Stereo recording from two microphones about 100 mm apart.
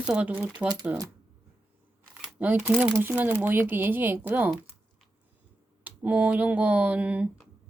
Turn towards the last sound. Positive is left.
turn(degrees=-15)  # may be behind; listen again after turning